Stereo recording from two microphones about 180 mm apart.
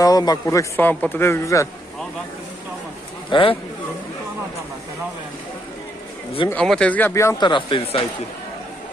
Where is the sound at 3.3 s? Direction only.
30° left (ahead or behind).